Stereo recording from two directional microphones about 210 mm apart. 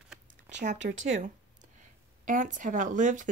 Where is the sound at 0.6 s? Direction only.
35° right (ahead or behind).